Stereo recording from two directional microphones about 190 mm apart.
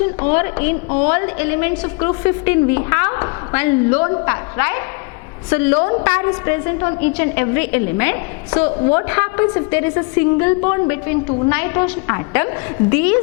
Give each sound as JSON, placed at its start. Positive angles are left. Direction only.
{"t": 0.0, "sound": "a woman's voice", "side_deg": 15}